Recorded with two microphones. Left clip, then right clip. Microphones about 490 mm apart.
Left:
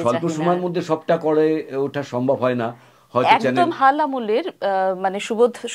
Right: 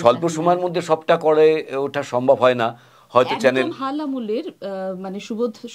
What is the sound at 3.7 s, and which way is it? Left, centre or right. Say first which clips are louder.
Speech: left 9 dB; left.